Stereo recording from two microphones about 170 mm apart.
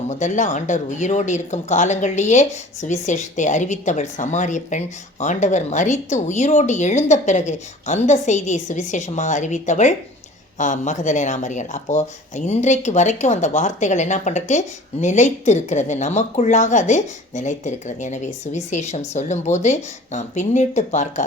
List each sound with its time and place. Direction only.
0.1 s speech: 45° left (ahead or behind)